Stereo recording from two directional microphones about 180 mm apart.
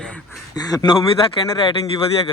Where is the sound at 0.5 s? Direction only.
20° left (ahead or behind).